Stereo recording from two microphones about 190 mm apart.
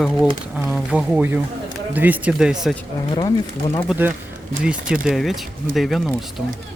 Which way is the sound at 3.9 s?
10° right (ahead or behind).